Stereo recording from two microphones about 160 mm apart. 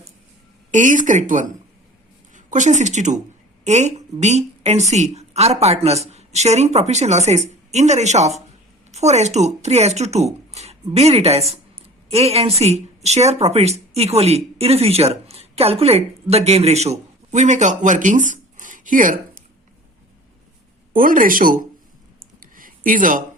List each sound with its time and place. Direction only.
0.7 s speech: 50° right (ahead or behind)
20.9 s speech: 60° right (ahead or behind)
22.2 s a sound: 60° right (ahead or behind)